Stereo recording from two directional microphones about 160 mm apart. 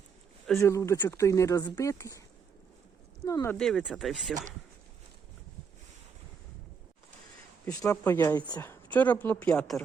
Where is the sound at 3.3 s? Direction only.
20° left (ahead or behind).